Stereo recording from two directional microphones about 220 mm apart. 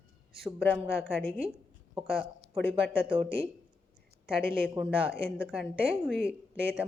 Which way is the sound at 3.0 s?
25° right (ahead or behind).